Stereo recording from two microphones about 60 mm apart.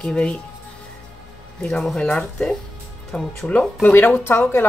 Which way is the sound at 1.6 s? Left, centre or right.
Centre.